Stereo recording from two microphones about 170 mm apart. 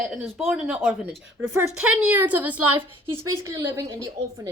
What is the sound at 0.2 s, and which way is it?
A woman's voice, 5° right (ahead or behind).